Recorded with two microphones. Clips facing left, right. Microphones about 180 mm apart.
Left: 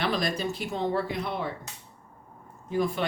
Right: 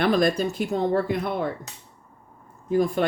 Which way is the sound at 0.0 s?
50° right (ahead or behind).